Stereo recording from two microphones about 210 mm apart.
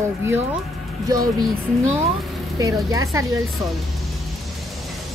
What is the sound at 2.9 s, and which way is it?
Speech, 15° right (ahead or behind).